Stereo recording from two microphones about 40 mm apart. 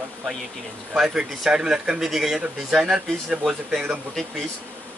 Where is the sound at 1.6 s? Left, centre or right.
Right.